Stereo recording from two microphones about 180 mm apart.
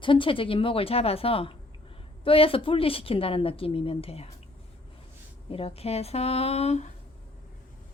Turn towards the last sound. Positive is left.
turn(degrees=40)  # may be behind; listen again after turning